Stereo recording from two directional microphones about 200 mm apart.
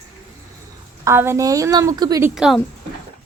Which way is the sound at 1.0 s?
10° right (ahead or behind).